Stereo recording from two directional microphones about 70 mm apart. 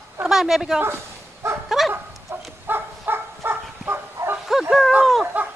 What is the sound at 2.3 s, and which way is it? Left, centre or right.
Bow-wow, right.